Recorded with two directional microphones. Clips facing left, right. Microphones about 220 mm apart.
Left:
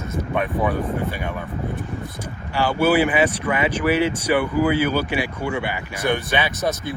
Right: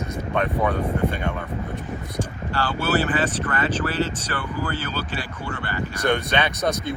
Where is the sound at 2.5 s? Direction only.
10° left (ahead or behind).